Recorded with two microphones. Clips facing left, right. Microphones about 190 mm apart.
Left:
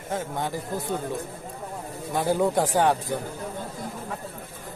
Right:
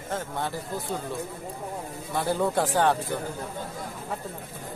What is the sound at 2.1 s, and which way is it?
Speech, 15° left (ahead or behind).